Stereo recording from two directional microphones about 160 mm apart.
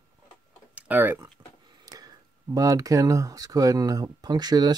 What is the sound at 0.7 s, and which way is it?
Speech, 10° right (ahead or behind).